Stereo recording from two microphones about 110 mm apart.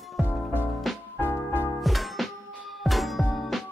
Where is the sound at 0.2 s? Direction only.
15° left (ahead or behind).